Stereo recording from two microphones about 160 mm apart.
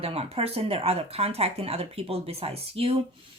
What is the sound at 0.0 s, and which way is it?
Speech, 40° right (ahead or behind).